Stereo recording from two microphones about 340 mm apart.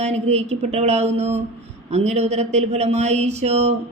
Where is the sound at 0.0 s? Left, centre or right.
Centre.